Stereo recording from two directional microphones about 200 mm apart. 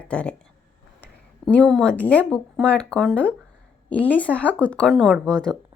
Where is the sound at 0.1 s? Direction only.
5° left (ahead or behind).